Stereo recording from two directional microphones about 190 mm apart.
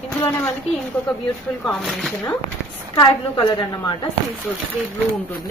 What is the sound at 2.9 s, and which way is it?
Speech, 25° left (ahead or behind).